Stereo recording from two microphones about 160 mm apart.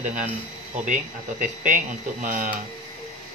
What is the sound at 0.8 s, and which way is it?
A man's voice, 50° right (ahead or behind).